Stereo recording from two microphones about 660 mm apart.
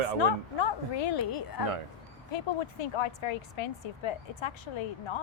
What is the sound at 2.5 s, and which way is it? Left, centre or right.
Speech, left.